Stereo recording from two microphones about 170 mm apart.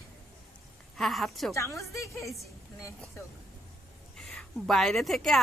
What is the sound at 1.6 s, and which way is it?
Speech, 15° left (ahead or behind).